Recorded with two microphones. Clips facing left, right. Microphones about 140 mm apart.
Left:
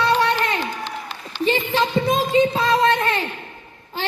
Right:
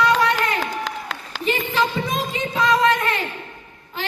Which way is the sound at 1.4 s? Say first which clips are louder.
Left 1 dB; 30° left (ahead or behind).